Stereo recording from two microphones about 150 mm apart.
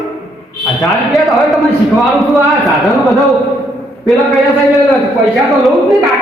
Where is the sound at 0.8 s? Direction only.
Centre (ahead or behind).